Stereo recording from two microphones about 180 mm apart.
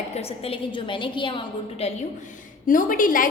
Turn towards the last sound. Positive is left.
turn(degrees=50)  # may be behind; listen again after turning